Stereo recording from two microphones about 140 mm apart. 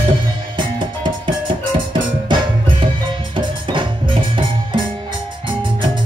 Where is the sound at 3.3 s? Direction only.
35° right (ahead or behind).